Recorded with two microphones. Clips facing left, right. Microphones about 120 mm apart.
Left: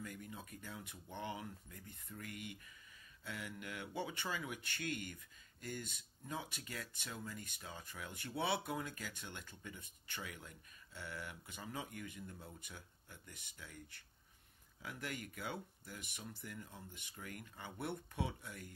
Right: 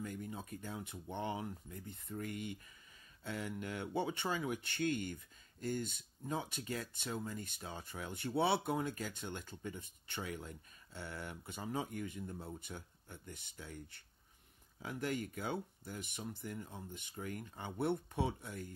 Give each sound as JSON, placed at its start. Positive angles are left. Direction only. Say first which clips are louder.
{"t": 0.0, "sound": "speech", "louder": "right 5 dB", "side_deg": -30}